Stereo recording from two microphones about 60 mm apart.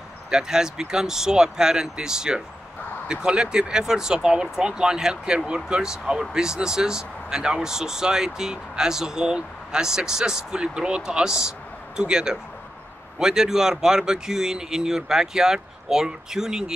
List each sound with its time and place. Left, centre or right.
0.3 s speech: centre